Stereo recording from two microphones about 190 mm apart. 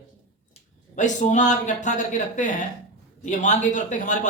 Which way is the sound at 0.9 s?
40° left (ahead or behind).